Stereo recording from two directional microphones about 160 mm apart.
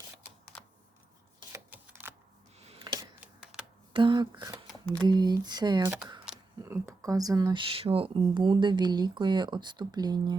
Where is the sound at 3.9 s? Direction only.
30° right (ahead or behind).